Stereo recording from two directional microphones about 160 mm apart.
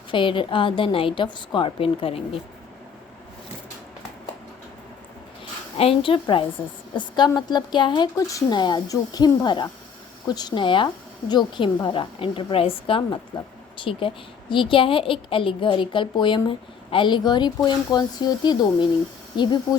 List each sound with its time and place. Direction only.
0.1 s a woman's voice: 30° left (ahead or behind)
5.7 s a woman's voice: 35° left (ahead or behind)